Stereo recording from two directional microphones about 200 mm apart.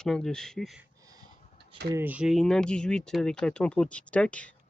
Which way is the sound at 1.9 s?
10° right (ahead or behind).